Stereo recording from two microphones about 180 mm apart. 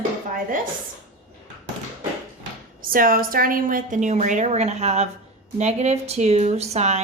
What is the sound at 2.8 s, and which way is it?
Speech, 50° right (ahead or behind).